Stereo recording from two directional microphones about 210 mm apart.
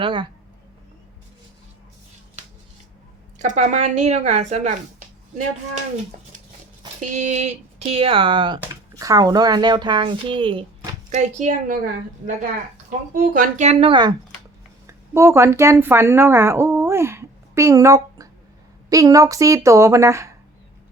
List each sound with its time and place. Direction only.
0.0 s speech: 25° right (ahead or behind)
3.3 s a woman's voice: 35° right (ahead or behind)
7.1 s speech: 35° right (ahead or behind)
11.1 s a woman's voice: 35° right (ahead or behind)
13.1 s a woman's voice: 40° right (ahead or behind); by 20.3 s 15° right (ahead or behind)